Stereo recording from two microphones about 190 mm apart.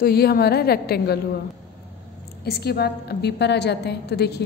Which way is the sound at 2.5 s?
55° left (ahead or behind).